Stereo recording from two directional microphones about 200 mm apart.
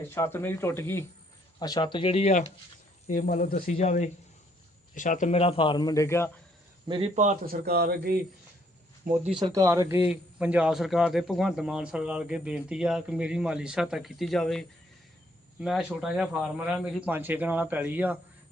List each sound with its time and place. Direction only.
0.1 s a man's voice: 10° left (ahead or behind)
6.8 s a man's voice: 25° right (ahead or behind)
7.2 s speech: 40° right (ahead or behind)
9.4 s a man's voice: 15° right (ahead or behind)